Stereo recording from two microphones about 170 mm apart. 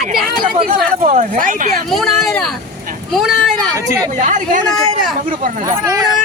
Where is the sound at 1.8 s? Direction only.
Centre (ahead or behind).